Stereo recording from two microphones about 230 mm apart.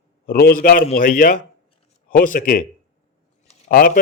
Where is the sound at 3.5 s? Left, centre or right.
Left.